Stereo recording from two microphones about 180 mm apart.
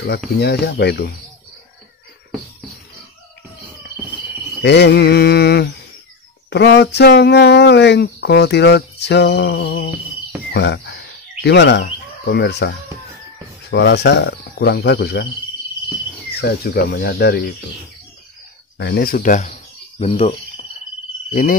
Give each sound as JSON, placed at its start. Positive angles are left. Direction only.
{"t": 0.4, "sound": "speech", "side_deg": 65}
{"t": 4.6, "sound": "speech", "side_deg": 70}
{"t": 10.5, "sound": "bird", "side_deg": 70}
{"t": 13.7, "sound": "speech", "side_deg": 70}
{"t": 16.3, "sound": "speech", "side_deg": 60}
{"t": 18.8, "sound": "speech", "side_deg": 60}
{"t": 21.3, "sound": "a sound", "side_deg": 50}